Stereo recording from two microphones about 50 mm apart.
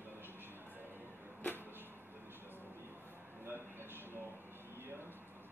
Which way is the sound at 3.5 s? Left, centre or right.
Right.